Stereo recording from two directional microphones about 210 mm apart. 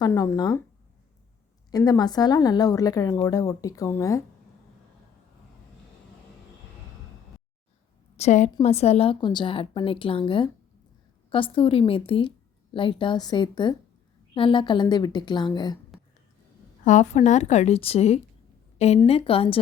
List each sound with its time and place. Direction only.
0.0 s a woman's voice: 15° left (ahead or behind)
1.7 s a woman's voice: 15° left (ahead or behind)
8.1 s a woman's voice: 30° left (ahead or behind)
16.8 s a woman's voice: 35° left (ahead or behind)